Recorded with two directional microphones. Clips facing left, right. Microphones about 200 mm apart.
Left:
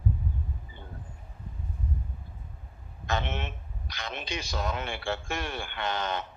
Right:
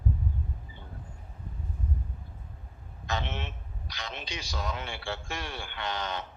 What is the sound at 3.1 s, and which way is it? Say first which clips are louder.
A man's voice: left 3 dB; 55° left (ahead or behind).